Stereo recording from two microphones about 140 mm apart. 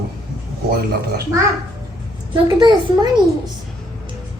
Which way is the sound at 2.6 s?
30° right (ahead or behind).